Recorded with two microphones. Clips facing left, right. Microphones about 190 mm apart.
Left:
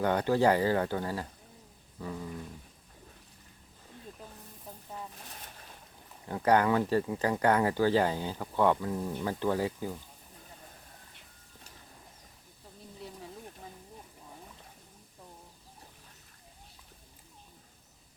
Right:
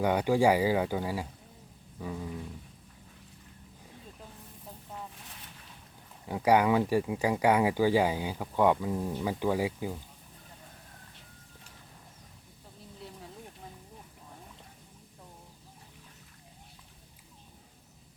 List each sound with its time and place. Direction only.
0.0 s speech: 10° right (ahead or behind)
5.1 s a sound: 45° left (ahead or behind)
6.2 s speech: 10° right (ahead or behind)